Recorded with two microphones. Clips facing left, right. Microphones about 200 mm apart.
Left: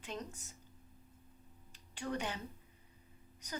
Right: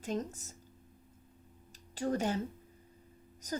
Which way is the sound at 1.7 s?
40° right (ahead or behind).